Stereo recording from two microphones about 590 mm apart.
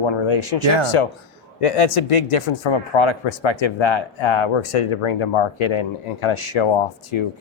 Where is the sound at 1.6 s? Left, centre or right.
Left.